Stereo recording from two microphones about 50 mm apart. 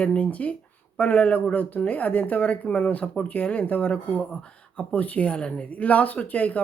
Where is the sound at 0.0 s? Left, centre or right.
Left.